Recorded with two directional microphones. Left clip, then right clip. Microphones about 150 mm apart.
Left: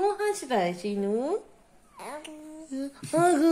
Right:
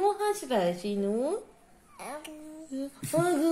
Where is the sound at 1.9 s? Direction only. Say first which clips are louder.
Left 1 dB; 20° left (ahead or behind).